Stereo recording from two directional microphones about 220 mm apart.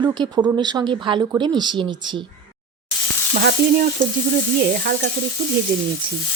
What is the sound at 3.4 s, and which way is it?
Speech, 45° right (ahead or behind).